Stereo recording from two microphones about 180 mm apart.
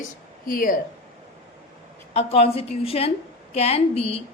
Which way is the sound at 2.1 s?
35° left (ahead or behind).